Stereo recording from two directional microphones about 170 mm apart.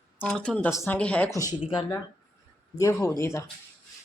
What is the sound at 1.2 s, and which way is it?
Speech, 20° left (ahead or behind).